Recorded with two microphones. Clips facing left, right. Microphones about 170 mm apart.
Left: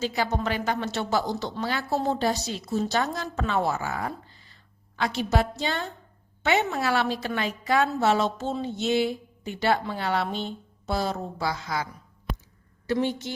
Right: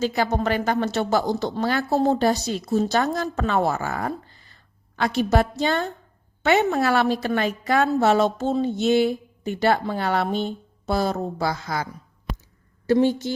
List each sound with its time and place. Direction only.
0.0 s a woman's voice: 50° right (ahead or behind)
12.9 s a woman's voice: 40° right (ahead or behind)